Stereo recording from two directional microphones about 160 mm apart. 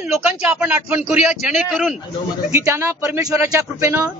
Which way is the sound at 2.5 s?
15° right (ahead or behind).